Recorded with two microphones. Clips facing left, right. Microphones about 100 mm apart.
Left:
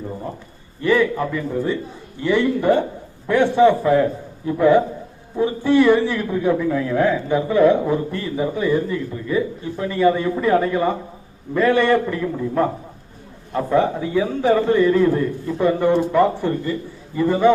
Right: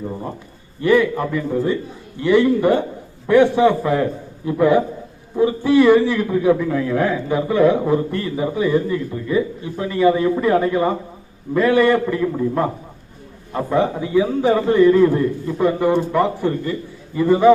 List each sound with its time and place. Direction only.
2.2 s a man's voice: centre (ahead or behind)
13.5 s a man's voice: 15° right (ahead or behind)
14.2 s a man's voice: 5° right (ahead or behind)